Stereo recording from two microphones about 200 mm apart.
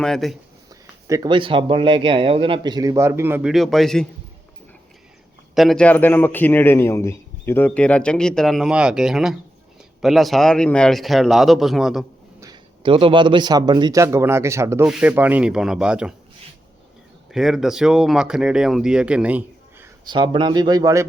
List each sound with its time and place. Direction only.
0.0 s speech: centre (ahead or behind)
0.7 s speech: 15° right (ahead or behind); by 4.0 s centre (ahead or behind)
5.5 s a man's voice: centre (ahead or behind)
12.4 s speech: 20° right (ahead or behind); by 16.1 s 5° right (ahead or behind)
17.3 s speech: centre (ahead or behind)
20.1 s speech: 25° right (ahead or behind)